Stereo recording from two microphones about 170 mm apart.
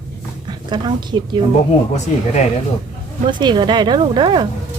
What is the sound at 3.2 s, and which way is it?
Speech, 25° right (ahead or behind).